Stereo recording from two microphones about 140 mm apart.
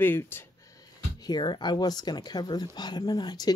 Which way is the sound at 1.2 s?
30° left (ahead or behind).